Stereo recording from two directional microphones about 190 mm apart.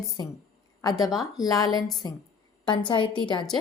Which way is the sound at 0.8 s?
20° left (ahead or behind).